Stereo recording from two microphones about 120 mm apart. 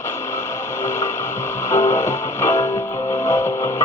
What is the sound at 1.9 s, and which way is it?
Music, 75° left (ahead or behind).